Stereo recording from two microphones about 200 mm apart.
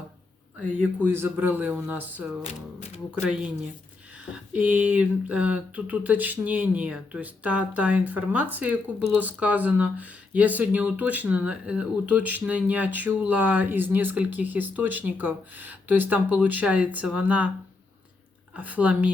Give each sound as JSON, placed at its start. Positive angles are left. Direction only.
{"t": 1.0, "sound": "speech", "side_deg": -10}
{"t": 2.4, "sound": "speech", "side_deg": 30}
{"t": 3.2, "sound": "speech", "side_deg": -5}
{"t": 18.5, "sound": "speech", "side_deg": -5}